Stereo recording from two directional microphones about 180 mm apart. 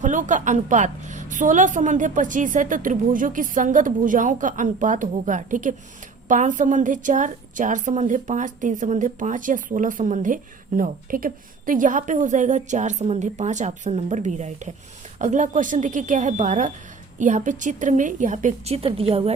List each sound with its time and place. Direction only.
0.0 s a woman's voice: 45° right (ahead or behind)